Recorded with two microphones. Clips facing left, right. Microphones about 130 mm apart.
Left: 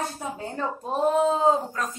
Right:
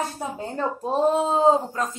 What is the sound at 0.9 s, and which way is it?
Speech, 30° right (ahead or behind).